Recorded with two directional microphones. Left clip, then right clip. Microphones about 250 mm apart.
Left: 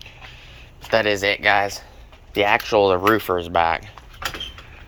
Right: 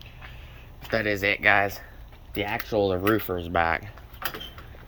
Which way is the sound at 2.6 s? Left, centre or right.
Centre.